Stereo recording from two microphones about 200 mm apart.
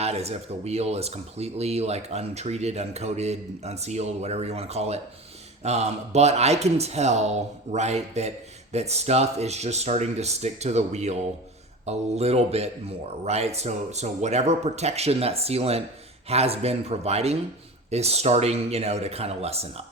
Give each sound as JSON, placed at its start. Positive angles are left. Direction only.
{"t": 0.0, "sound": "speech", "side_deg": -30}